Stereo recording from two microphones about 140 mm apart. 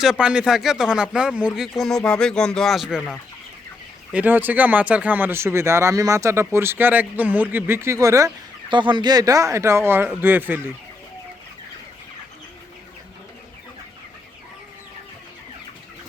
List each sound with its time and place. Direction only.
0.0 s speech: 5° right (ahead or behind)
4.1 s speech: 10° right (ahead or behind)
8.7 s speech: 35° right (ahead or behind); by 10.6 s 15° right (ahead or behind)